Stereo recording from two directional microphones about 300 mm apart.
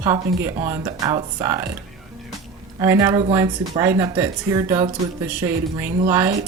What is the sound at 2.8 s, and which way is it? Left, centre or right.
Speech, centre.